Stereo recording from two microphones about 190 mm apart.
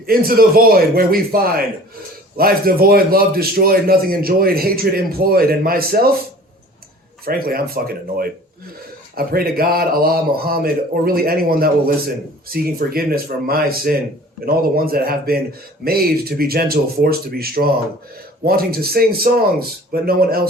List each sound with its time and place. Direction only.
0.0 s a man's voice: 50° right (ahead or behind)
7.3 s a man's voice: 50° right (ahead or behind)